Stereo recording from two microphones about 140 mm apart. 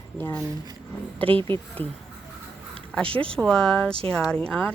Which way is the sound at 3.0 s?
40° right (ahead or behind).